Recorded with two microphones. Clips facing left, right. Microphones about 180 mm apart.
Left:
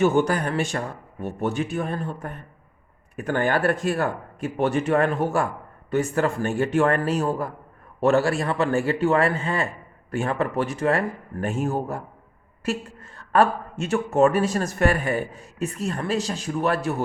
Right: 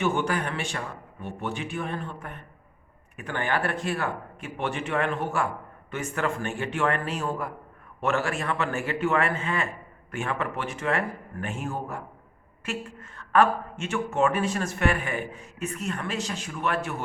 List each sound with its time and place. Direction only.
0.0 s a woman's voice: 40° left (ahead or behind)